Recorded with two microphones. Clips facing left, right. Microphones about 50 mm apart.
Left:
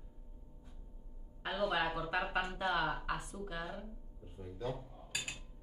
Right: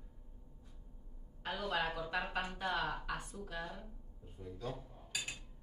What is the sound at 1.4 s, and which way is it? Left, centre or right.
Speech, centre.